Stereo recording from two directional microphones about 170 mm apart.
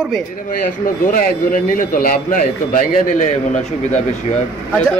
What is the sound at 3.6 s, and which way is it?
Speech, 40° left (ahead or behind).